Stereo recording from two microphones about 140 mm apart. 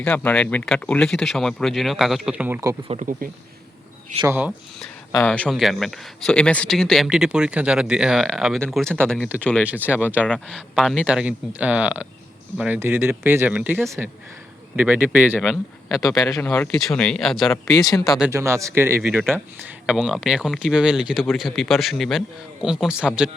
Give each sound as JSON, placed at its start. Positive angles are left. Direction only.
{"t": 0.0, "sound": "speech", "side_deg": 10}
{"t": 2.8, "sound": "speech", "side_deg": -45}
{"t": 4.3, "sound": "speech", "side_deg": -15}
{"t": 5.2, "sound": "speech", "side_deg": 10}
{"t": 9.9, "sound": "speech", "side_deg": -10}
{"t": 10.2, "sound": "speech", "side_deg": 5}
{"t": 16.2, "sound": "speech", "side_deg": 15}
{"t": 16.8, "sound": "speech", "side_deg": 5}
{"t": 18.3, "sound": "speech", "side_deg": -20}
{"t": 19.9, "sound": "speech", "side_deg": 0}